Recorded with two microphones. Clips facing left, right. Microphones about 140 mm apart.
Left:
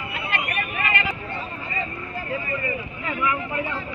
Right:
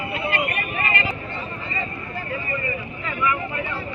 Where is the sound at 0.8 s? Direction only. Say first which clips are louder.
Even; 30° right (ahead or behind).